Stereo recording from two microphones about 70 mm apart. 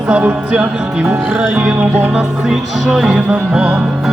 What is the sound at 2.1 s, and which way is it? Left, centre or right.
Music, centre.